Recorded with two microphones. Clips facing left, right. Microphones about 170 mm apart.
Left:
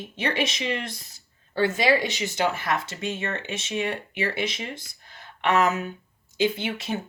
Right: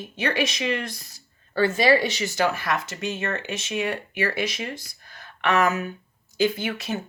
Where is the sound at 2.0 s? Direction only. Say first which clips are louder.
Right 2 dB; 20° left (ahead or behind).